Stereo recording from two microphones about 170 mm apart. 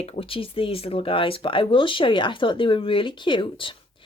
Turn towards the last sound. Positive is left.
turn(degrees=30)  # may be behind; listen again after turning